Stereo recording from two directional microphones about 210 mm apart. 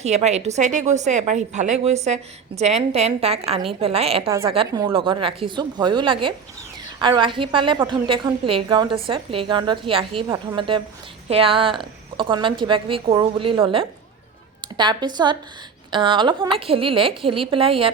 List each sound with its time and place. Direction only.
0.0 s a woman's voice: 30° right (ahead or behind)